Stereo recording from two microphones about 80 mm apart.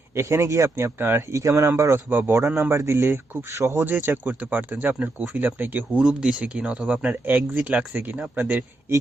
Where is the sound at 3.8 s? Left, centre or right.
Right.